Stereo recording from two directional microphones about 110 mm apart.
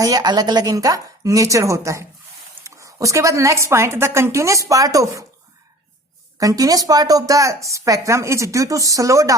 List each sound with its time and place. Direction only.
0.0 s a woman's voice: 35° right (ahead or behind)
6.4 s speech: 30° right (ahead or behind)